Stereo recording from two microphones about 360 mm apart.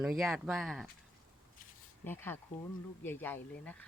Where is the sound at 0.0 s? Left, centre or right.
Centre.